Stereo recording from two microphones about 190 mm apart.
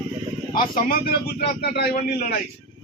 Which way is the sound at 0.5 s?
50° left (ahead or behind).